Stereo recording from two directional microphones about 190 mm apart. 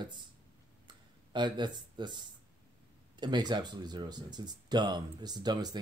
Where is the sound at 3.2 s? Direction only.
20° right (ahead or behind).